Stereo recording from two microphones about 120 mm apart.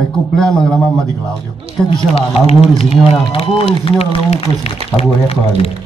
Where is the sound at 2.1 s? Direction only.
60° left (ahead or behind).